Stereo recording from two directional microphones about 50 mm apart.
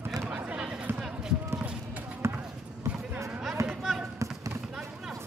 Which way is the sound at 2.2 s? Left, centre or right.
Right.